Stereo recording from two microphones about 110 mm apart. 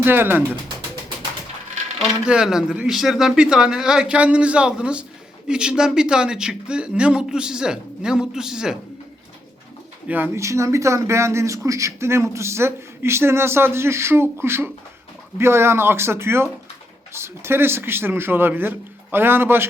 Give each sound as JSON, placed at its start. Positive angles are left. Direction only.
{"t": 0.0, "sound": "speech", "side_deg": -20}
{"t": 2.0, "sound": "speech", "side_deg": -5}
{"t": 10.1, "sound": "speech", "side_deg": -20}